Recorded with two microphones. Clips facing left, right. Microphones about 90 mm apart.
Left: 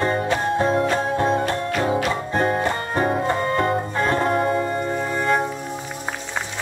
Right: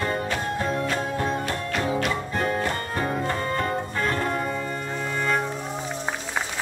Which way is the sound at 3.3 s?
25° left (ahead or behind).